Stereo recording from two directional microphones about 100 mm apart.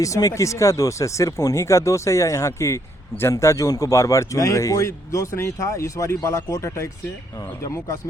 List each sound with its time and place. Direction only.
0.0 s speech: 35° left (ahead or behind)